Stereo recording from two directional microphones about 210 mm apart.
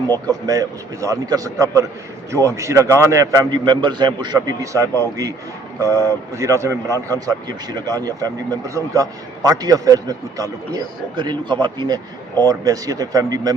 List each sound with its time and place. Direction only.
0.1 s speech: 15° right (ahead or behind)